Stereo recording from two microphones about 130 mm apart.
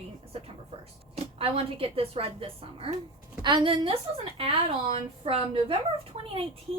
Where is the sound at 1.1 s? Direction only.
45° right (ahead or behind).